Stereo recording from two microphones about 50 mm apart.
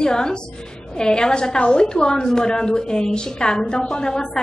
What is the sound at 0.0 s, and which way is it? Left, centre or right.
A woman's voice, centre.